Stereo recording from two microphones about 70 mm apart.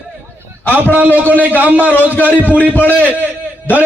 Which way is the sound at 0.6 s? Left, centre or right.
Left.